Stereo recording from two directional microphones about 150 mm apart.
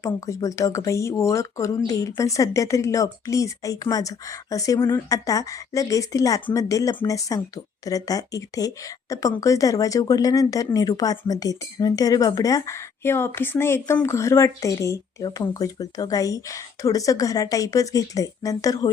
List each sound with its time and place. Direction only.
0.0 s speech: 20° left (ahead or behind)